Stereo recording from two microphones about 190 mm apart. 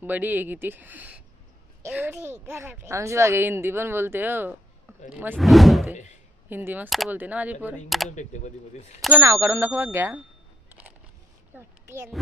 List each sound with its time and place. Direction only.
0.0 s speech: 10° right (ahead or behind)
8.1 s speech: 40° left (ahead or behind)
9.0 s speech: 10° right (ahead or behind)
11.5 s a sound: 10° right (ahead or behind)